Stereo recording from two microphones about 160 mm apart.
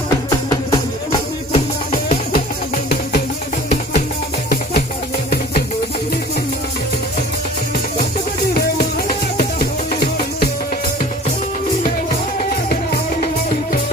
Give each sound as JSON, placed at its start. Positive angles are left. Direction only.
{"t": 0.1, "sound": "music", "side_deg": 25}
{"t": 1.5, "sound": "music", "side_deg": 40}
{"t": 2.3, "sound": "music", "side_deg": 70}
{"t": 9.0, "sound": "music", "side_deg": 65}